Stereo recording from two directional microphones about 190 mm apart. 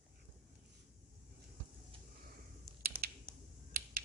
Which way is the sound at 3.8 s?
50° right (ahead or behind).